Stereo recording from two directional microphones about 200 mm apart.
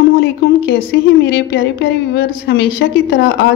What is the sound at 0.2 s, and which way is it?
A woman's voice, 55° left (ahead or behind).